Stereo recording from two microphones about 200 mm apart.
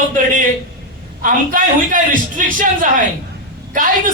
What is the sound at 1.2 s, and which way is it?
Speech, 40° right (ahead or behind).